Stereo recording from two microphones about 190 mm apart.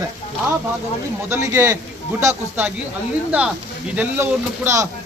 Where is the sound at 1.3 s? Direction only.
15° right (ahead or behind).